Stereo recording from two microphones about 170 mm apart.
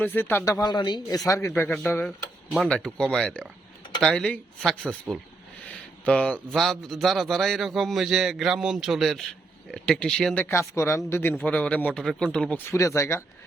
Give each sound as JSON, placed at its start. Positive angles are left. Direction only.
{"t": 0.0, "sound": "a man's voice", "side_deg": 10}
{"t": 12.7, "sound": "speech", "side_deg": 15}